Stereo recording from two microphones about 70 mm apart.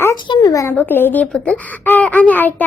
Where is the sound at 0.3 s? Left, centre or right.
Left.